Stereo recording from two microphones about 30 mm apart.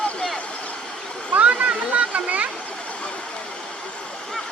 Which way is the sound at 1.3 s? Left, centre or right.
Right.